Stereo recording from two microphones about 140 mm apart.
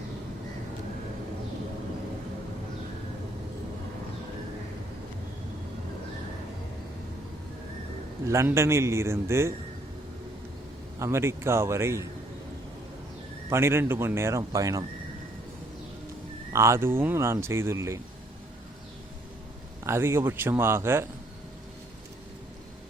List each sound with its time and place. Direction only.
8.3 s speech: 20° right (ahead or behind)
11.0 s speech: 20° right (ahead or behind)
13.5 s a man's voice: 15° right (ahead or behind)
16.5 s speech: 20° right (ahead or behind)
19.8 s a man's voice: 20° right (ahead or behind)